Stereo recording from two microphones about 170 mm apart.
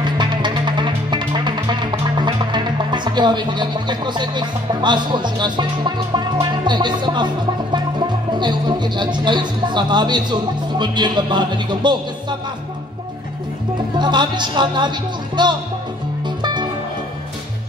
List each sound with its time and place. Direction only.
0.0 s music: 25° right (ahead or behind)
6.6 s speech: 25° right (ahead or behind)
8.3 s speech: 25° right (ahead or behind)
13.9 s speech: 25° right (ahead or behind)